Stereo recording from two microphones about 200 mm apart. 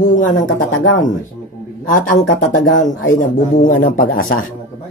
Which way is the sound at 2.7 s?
40° left (ahead or behind).